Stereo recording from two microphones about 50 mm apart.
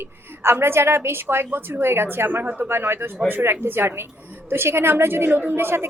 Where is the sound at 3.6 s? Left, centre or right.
Right.